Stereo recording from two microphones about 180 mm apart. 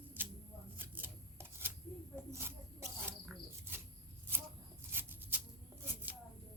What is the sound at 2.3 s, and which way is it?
Mouse, 15° right (ahead or behind).